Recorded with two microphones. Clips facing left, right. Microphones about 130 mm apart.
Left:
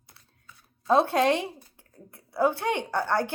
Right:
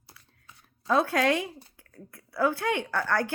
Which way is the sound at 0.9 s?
25° left (ahead or behind).